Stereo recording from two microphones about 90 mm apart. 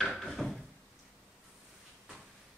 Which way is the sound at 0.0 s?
Centre (ahead or behind).